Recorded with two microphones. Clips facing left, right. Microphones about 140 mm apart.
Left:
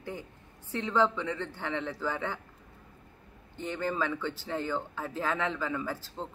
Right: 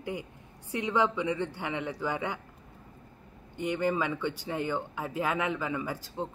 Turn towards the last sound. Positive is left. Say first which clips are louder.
# right 2 dB
turn(degrees=-15)  # may be behind; listen again after turning